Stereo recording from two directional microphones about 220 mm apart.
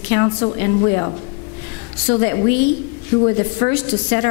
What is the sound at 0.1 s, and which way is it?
A woman's voice, 20° left (ahead or behind).